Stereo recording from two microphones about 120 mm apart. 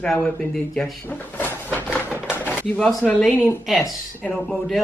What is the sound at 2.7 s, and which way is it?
Speech, 5° left (ahead or behind).